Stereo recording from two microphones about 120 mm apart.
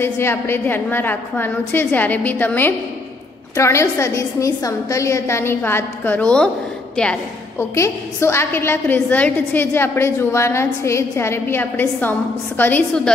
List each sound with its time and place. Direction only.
0.0 s a woman's voice: 20° left (ahead or behind)
7.5 s a woman's voice: 25° left (ahead or behind)